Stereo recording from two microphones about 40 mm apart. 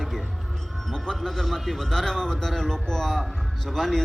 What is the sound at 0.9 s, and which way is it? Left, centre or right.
A man's voice, centre.